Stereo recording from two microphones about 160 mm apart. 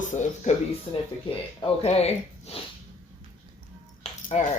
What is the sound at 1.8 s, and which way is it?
Speech, 40° left (ahead or behind).